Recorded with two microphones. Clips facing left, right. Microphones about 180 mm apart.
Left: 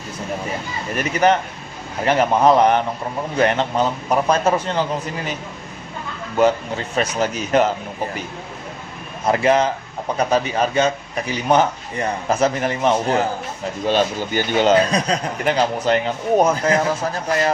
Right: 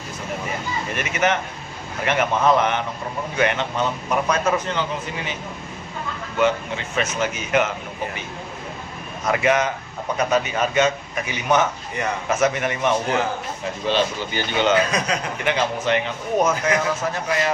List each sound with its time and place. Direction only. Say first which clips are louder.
0.9 s a man's voice: left 6 dB; 35° left (ahead or behind)
6.3 s a man's voice: left 4 dB; 35° left (ahead or behind)
9.2 s a man's voice: left 3 dB; 30° left (ahead or behind)
13.8 s a man's voice: left 3 dB; 45° left (ahead or behind)